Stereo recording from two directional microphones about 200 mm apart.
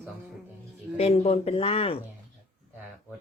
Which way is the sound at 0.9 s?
35° left (ahead or behind).